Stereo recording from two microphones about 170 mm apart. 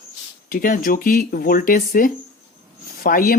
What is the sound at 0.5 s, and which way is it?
Speech, 55° left (ahead or behind).